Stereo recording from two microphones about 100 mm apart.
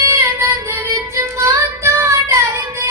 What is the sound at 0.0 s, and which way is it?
Child singing, 30° right (ahead or behind).